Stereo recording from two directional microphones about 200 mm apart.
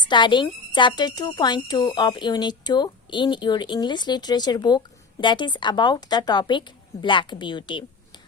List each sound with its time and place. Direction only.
0.0 s speech: 25° left (ahead or behind)